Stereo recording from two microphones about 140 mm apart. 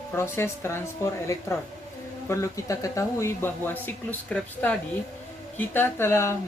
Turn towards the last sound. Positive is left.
turn(degrees=20)  # may be behind; listen again after turning